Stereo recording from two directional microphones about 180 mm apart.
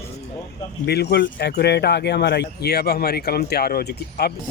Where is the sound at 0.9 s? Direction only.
65° left (ahead or behind).